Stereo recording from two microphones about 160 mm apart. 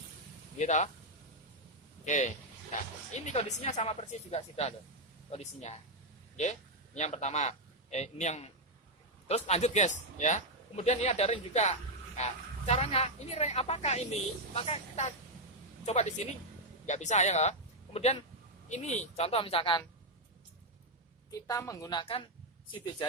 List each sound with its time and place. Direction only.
0.6 s a man's voice: 45° left (ahead or behind)
2.0 s a man's voice: 50° left (ahead or behind); by 19.8 s 35° left (ahead or behind)
21.2 s a woman's voice: 20° left (ahead or behind)